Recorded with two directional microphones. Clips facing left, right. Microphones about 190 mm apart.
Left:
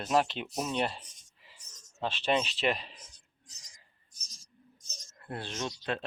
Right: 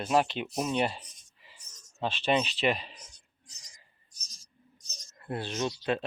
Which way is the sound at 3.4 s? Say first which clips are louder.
Right 1 dB; 45° left (ahead or behind).